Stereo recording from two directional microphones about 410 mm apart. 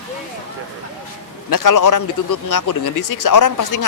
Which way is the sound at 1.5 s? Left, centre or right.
Left.